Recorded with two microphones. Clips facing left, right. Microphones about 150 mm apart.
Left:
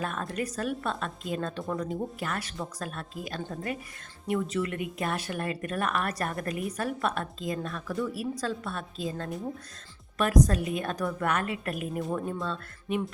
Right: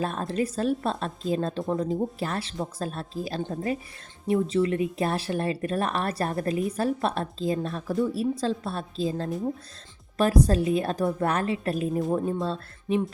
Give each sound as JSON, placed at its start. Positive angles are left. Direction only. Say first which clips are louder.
{"t": 0.0, "sound": "a woman's voice", "louder": "right 5 dB", "side_deg": -30}